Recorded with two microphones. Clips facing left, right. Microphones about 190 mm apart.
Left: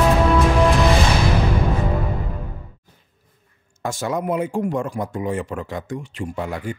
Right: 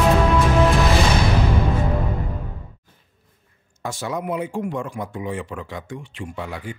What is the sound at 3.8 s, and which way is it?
Speech, 45° left (ahead or behind).